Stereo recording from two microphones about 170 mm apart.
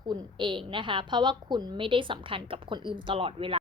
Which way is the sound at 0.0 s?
25° right (ahead or behind).